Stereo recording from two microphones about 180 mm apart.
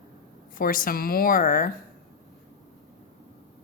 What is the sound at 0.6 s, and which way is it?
A woman's voice, 50° left (ahead or behind).